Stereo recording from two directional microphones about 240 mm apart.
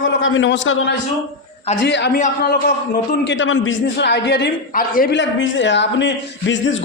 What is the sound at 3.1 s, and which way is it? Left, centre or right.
A man's voice, left.